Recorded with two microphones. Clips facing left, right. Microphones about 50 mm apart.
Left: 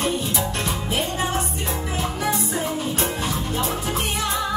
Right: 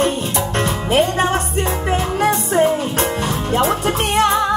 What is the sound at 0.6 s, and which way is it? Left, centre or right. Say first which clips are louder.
Music: right 9 dB; right.